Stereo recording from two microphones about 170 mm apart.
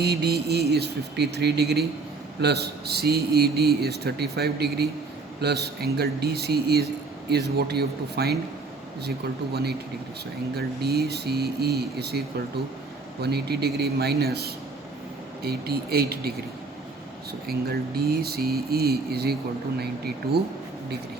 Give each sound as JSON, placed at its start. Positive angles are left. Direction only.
{"t": 0.0, "sound": "a man's voice", "side_deg": -75}
{"t": 13.2, "sound": "a man's voice", "side_deg": -70}
{"t": 17.4, "sound": "mantra", "side_deg": -65}